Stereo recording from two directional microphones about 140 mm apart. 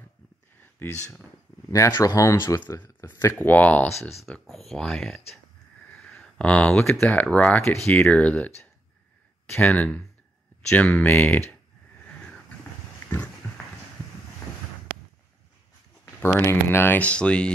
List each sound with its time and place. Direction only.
0.7 s speech: 10° left (ahead or behind)
1.7 s speech: 20° left (ahead or behind)
4.1 s speech: centre (ahead or behind)
6.0 s a sound: 10° left (ahead or behind)
7.0 s speech: 10° left (ahead or behind)
16.2 s speech: 15° left (ahead or behind)